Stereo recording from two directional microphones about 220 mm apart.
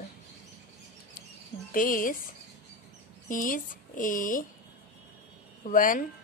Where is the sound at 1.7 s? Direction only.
40° left (ahead or behind).